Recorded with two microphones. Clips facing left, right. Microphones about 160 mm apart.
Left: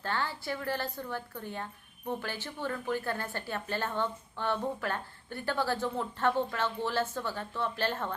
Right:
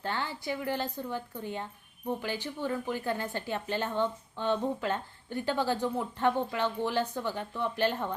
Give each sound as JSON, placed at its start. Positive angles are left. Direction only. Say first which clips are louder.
{"t": 0.0, "sound": "a woman's voice", "louder": "even", "side_deg": -15}